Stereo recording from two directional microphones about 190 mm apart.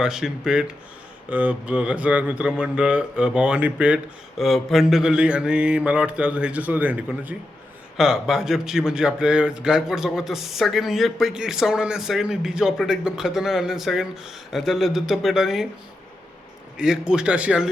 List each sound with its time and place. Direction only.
0.0 s speech: 5° right (ahead or behind)
16.7 s speech: 5° right (ahead or behind)